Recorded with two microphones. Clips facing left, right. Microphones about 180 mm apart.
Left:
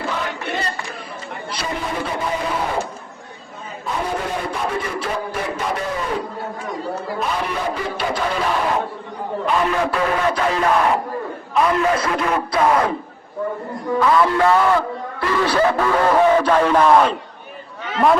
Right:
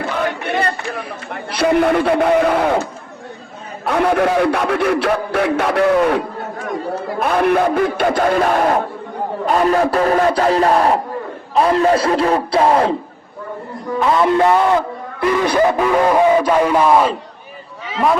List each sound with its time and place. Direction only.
0.2 s speech: 60° right (ahead or behind)
3.8 s speech: 75° right (ahead or behind); by 12.9 s 30° right (ahead or behind)
14.0 s a man's voice: 25° right (ahead or behind); by 18.2 s centre (ahead or behind)